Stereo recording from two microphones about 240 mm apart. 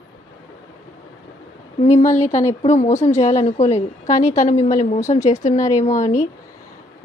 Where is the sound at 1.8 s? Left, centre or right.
Left.